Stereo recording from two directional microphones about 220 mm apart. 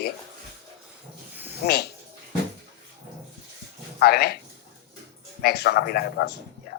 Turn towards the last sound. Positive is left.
turn(degrees=45)  # may be behind; listen again after turning